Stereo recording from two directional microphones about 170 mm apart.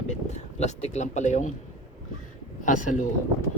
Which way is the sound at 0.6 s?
40° left (ahead or behind).